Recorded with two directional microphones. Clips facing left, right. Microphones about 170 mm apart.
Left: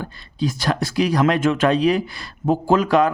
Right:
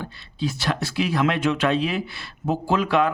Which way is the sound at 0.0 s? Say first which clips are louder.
Left 4 dB; 45° left (ahead or behind).